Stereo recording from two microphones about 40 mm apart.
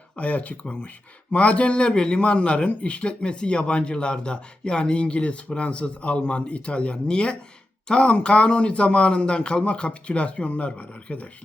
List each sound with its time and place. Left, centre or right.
0.2 s speech: left